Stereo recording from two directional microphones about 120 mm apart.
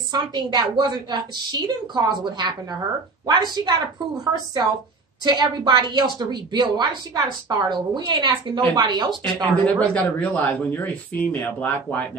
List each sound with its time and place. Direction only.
0.1 s a woman's voice: 35° right (ahead or behind)
9.7 s a man's voice: 10° left (ahead or behind)